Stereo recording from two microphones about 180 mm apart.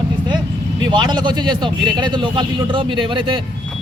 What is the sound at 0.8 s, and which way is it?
Speech, 25° right (ahead or behind).